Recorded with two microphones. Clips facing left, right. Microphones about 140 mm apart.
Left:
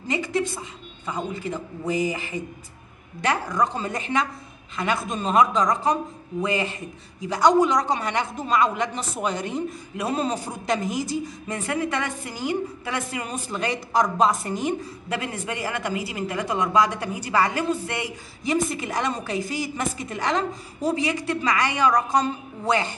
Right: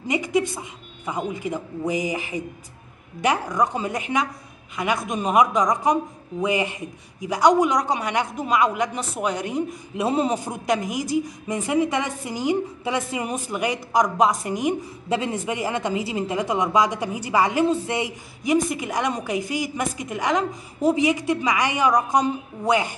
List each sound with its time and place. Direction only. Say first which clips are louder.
0.1 s a woman's voice: right 3 dB; 15° right (ahead or behind)
9.9 s a woman's voice: right 4 dB; 20° right (ahead or behind)